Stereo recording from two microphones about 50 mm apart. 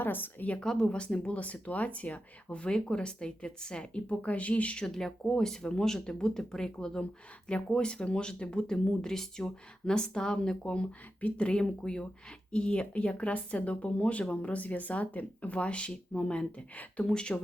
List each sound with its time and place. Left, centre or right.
0.0 s a woman's voice: left
0.6 s speech: centre
4.9 s speech: centre